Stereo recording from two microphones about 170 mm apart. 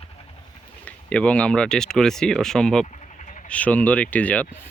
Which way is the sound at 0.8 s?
5° left (ahead or behind).